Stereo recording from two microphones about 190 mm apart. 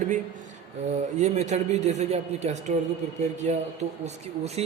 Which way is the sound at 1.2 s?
40° right (ahead or behind).